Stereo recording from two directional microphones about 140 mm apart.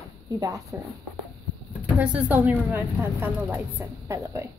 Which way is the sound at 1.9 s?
10° right (ahead or behind).